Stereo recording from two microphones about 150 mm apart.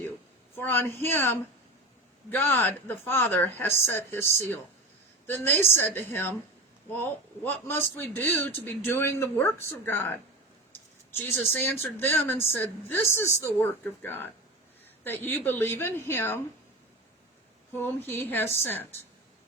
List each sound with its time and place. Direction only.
0.5 s a man's voice: 15° left (ahead or behind)
17.7 s a man's voice: 15° left (ahead or behind)